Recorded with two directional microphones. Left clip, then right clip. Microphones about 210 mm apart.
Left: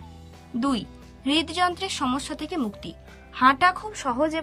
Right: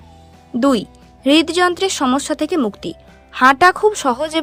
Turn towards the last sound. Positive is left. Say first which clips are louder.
# right 5 dB
turn(degrees=-30)  # may be behind; listen again after turning